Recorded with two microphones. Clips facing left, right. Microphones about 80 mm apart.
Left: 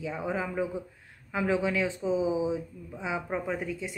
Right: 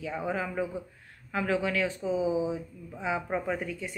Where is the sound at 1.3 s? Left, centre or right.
Left.